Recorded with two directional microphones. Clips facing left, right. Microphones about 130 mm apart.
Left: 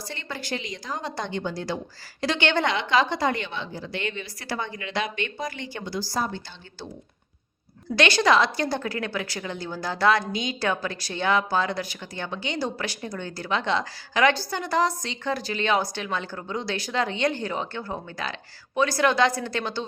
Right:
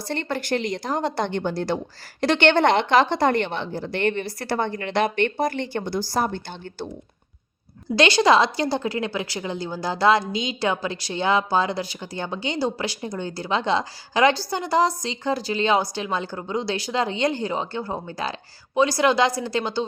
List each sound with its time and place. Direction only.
0.1 s a woman's voice: 60° right (ahead or behind)
7.9 s a woman's voice: 30° right (ahead or behind)